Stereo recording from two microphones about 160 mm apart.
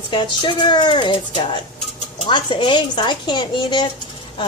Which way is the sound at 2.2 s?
30° left (ahead or behind).